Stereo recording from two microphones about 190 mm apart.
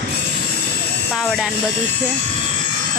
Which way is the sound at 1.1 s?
Centre (ahead or behind).